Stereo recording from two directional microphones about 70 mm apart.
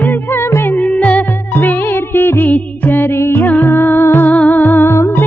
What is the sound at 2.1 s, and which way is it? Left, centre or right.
Music, left.